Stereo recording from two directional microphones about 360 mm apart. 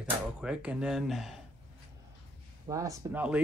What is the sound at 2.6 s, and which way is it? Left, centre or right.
Speech, centre.